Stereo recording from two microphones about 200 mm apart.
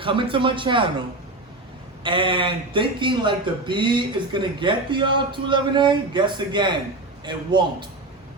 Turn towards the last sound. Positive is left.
turn(degrees=-20)  # may be behind; listen again after turning